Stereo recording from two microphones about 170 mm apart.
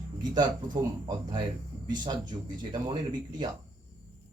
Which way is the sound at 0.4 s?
25° right (ahead or behind).